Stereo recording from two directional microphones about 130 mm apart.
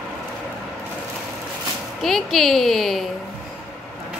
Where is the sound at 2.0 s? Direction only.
Centre (ahead or behind).